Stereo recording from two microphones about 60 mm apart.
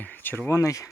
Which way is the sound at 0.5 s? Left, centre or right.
Left.